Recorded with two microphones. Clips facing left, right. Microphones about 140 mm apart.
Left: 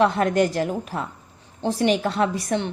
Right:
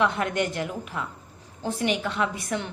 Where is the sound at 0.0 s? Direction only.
40° left (ahead or behind).